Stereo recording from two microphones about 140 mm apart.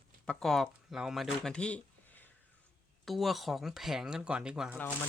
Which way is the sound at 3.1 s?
Centre (ahead or behind).